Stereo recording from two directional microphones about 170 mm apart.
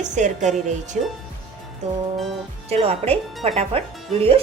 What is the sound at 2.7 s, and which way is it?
Speech, 35° right (ahead or behind).